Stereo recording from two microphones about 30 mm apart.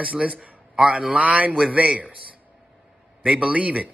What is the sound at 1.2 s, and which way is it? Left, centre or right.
Speech, right.